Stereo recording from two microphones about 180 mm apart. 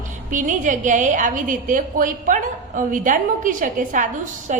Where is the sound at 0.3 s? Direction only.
45° right (ahead or behind).